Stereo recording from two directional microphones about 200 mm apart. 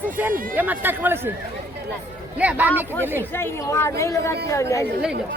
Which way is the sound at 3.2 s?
10° left (ahead or behind).